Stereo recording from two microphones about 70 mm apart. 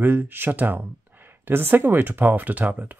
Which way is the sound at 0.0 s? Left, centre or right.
Right.